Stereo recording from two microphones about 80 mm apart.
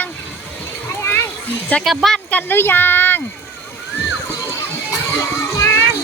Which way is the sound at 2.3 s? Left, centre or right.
Left.